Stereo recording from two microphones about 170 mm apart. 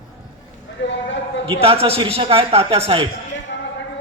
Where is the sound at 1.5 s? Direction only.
35° right (ahead or behind).